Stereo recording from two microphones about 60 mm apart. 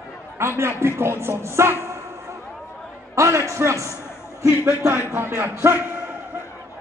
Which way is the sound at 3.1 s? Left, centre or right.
Right.